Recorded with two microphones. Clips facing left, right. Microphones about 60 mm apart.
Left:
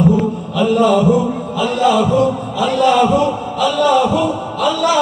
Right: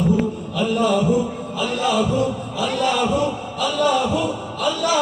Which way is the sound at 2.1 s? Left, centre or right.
Left.